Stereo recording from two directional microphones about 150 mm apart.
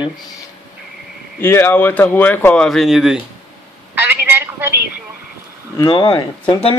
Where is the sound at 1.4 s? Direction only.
15° left (ahead or behind); by 3.2 s 5° right (ahead or behind).